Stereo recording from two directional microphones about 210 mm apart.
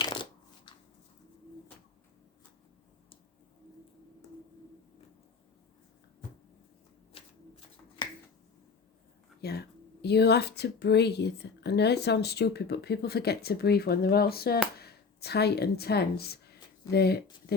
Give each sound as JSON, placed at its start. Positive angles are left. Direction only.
{"t": 0.0, "sound": "shuffling cards", "side_deg": 20}
{"t": 4.2, "sound": "a sound", "side_deg": 15}
{"t": 7.1, "sound": "shuffling cards", "side_deg": 25}
{"t": 9.4, "sound": "speech", "side_deg": 50}